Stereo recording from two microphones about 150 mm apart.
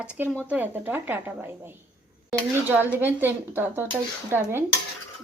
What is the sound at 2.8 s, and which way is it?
Speech, 15° right (ahead or behind).